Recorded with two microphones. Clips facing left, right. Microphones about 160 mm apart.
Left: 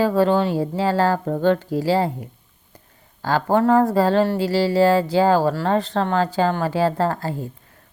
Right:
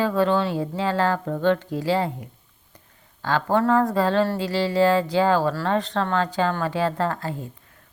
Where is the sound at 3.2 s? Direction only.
35° left (ahead or behind).